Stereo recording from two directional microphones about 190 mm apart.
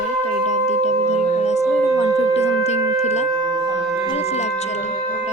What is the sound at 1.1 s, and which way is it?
Music, 35° left (ahead or behind).